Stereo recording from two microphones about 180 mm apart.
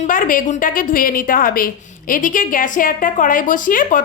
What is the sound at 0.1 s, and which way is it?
A woman's voice, 50° left (ahead or behind).